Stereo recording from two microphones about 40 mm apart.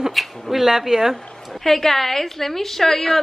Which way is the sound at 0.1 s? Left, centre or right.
Centre.